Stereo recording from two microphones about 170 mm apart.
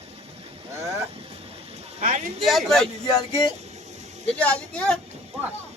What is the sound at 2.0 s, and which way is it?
Speech, 40° right (ahead or behind).